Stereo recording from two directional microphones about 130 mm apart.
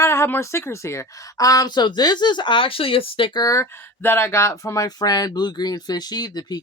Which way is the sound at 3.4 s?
20° left (ahead or behind).